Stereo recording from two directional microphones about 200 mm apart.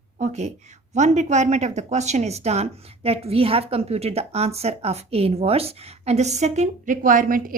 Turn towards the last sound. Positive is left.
turn(degrees=-45)  # may be behind; listen again after turning